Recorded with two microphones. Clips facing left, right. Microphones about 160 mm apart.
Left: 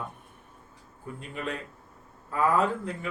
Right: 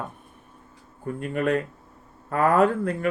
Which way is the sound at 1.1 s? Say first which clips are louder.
Right 11 dB; 55° right (ahead or behind).